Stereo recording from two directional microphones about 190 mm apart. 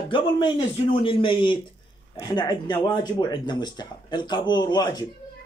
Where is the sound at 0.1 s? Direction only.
25° left (ahead or behind).